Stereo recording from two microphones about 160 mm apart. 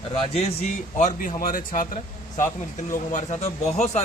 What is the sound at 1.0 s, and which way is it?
Speech, 55° left (ahead or behind).